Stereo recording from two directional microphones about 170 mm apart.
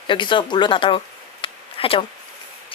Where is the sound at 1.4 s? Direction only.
35° left (ahead or behind).